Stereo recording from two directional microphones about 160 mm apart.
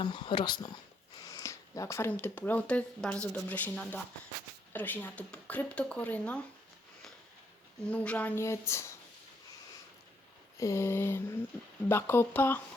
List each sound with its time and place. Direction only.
0.0 s speech: 30° left (ahead or behind); by 6.4 s 10° left (ahead or behind)
7.9 s speech: 10° left (ahead or behind)
10.6 s speech: 20° left (ahead or behind)